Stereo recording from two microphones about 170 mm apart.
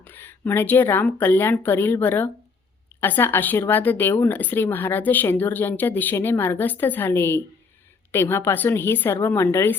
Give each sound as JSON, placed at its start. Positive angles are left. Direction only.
{"t": 0.0, "sound": "a woman's voice", "side_deg": 10}